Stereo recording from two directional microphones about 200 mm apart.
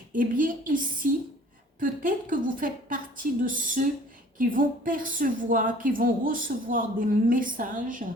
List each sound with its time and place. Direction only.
0.1 s a woman's voice: 40° right (ahead or behind)
1.8 s a woman's voice: 45° right (ahead or behind)